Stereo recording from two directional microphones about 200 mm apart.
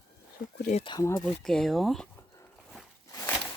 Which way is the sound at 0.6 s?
35° left (ahead or behind).